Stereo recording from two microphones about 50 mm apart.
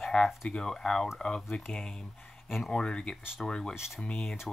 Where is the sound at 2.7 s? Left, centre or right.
Centre.